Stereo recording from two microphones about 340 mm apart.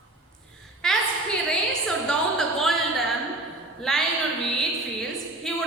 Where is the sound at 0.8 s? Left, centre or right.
Centre.